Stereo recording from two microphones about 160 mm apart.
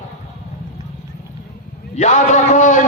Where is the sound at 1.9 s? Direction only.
45° left (ahead or behind).